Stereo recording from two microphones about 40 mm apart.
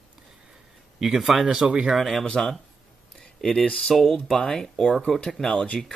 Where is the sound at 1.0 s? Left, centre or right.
Centre.